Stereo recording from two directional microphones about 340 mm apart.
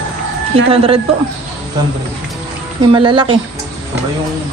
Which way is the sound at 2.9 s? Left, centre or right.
Centre.